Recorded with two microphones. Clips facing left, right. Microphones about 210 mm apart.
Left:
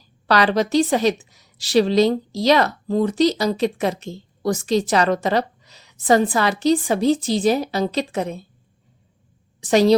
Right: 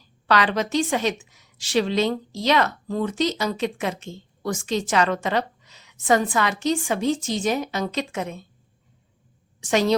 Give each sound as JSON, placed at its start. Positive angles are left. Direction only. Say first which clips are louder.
{"t": 0.3, "sound": "a woman's voice", "louder": "left 4 dB", "side_deg": 35}
{"t": 9.6, "sound": "a woman's voice", "louder": "left 6 dB", "side_deg": 35}